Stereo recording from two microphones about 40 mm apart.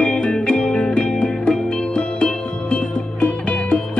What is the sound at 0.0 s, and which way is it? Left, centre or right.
Music, left.